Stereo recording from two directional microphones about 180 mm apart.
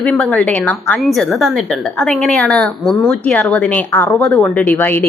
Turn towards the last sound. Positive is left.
turn(degrees=10)  # may be behind; listen again after turning